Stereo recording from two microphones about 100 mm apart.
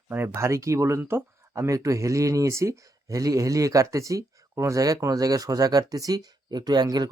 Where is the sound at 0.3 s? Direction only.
30° right (ahead or behind).